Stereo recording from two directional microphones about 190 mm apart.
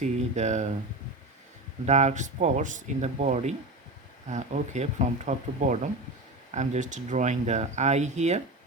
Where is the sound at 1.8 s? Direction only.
35° right (ahead or behind).